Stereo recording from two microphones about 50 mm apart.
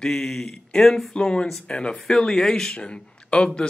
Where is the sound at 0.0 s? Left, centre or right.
Centre.